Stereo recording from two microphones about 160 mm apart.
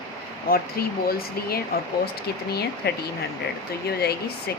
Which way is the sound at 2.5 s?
90° left.